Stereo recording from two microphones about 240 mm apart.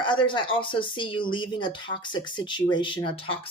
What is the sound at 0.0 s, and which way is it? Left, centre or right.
A woman's voice, centre.